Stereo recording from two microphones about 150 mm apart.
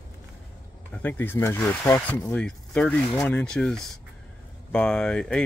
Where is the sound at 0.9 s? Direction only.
15° left (ahead or behind).